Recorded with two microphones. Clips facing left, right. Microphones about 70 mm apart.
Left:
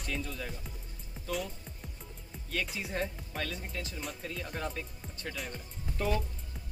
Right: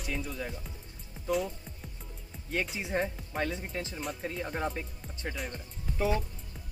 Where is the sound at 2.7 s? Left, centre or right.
Right.